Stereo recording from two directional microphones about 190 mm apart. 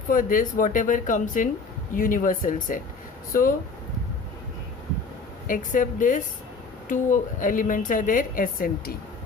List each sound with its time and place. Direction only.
0.1 s a woman's voice: 45° left (ahead or behind)
5.5 s a woman's voice: 45° left (ahead or behind)